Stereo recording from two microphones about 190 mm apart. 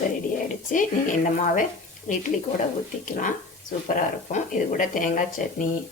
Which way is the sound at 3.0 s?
45° left (ahead or behind).